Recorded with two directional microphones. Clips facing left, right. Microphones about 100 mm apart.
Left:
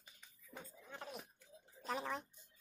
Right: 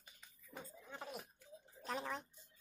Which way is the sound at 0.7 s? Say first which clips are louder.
Right 1 dB; 5° right (ahead or behind).